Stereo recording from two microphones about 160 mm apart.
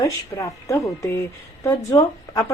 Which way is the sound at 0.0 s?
20° left (ahead or behind).